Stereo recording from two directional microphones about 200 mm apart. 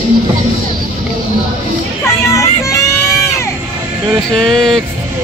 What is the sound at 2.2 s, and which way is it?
Music, 15° left (ahead or behind).